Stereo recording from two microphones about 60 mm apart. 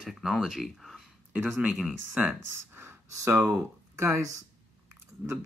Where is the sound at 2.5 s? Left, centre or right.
Right.